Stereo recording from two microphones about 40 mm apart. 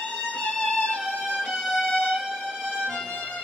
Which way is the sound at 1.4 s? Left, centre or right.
Centre.